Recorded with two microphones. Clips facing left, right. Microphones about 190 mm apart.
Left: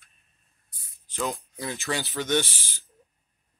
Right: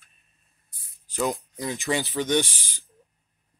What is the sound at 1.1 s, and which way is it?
Speech, 10° right (ahead or behind).